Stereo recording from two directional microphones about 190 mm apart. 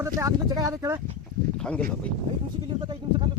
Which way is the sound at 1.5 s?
5° left (ahead or behind).